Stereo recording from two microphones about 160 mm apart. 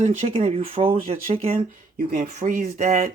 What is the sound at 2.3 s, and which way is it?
Speech, 45° right (ahead or behind).